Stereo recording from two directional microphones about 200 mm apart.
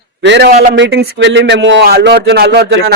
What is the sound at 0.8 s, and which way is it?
A man's voice, 65° right (ahead or behind).